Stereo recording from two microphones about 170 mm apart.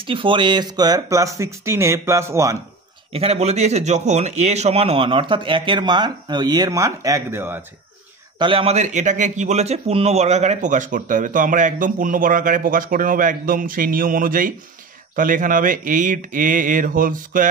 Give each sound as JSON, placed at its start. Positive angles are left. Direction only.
{"t": 0.0, "sound": "speech", "side_deg": -30}
{"t": 3.1, "sound": "a man's voice", "side_deg": -35}
{"t": 8.4, "sound": "a man's voice", "side_deg": -30}